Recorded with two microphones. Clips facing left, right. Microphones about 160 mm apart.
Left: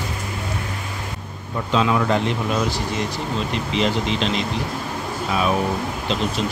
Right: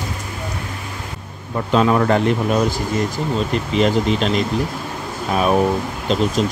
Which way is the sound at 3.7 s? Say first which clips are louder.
Right 5 dB; 45° right (ahead or behind).